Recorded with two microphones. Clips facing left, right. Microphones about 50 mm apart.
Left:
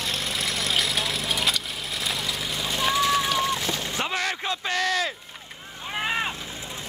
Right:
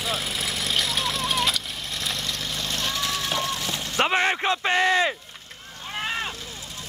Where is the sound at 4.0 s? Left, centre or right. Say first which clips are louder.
Right 8 dB; right.